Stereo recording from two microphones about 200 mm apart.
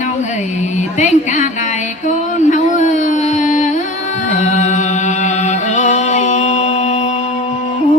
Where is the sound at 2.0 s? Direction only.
35° left (ahead or behind).